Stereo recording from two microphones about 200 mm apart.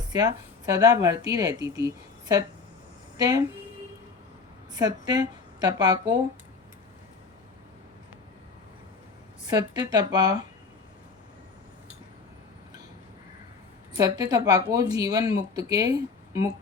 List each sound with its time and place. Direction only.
0.1 s a woman's voice: 20° right (ahead or behind)
4.8 s a woman's voice: 20° right (ahead or behind)
9.5 s speech: 20° right (ahead or behind)
13.9 s a woman's voice: 20° right (ahead or behind)